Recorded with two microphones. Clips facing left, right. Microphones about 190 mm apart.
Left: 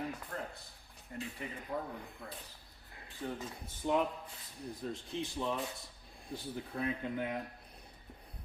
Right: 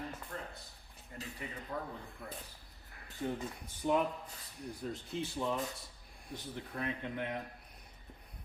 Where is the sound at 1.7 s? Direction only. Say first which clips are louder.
Left 2 dB; 10° left (ahead or behind).